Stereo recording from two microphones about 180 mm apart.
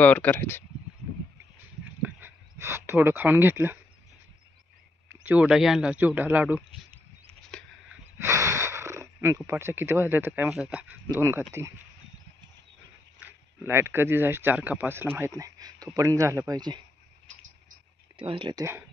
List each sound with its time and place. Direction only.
0.0 s speech: 10° left (ahead or behind)
1.9 s a sound: 10° right (ahead or behind)
5.1 s speech: 10° right (ahead or behind)
7.5 s a sound: 5° left (ahead or behind)
7.9 s snort: 15° right (ahead or behind)
9.5 s speech: 15° right (ahead or behind)
13.2 s speech: 15° right (ahead or behind)
18.1 s speech: 30° right (ahead or behind)